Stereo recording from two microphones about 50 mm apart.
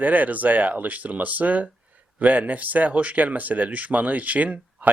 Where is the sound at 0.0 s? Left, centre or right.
Right.